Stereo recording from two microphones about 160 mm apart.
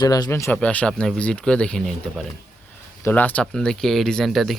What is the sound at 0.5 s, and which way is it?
Speech, 10° left (ahead or behind).